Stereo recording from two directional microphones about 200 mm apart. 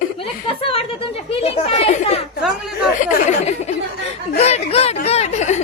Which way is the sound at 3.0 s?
35° left (ahead or behind).